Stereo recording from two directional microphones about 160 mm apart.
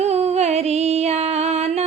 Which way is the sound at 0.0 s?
40° right (ahead or behind).